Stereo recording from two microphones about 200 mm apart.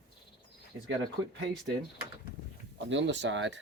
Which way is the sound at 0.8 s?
65° right (ahead or behind).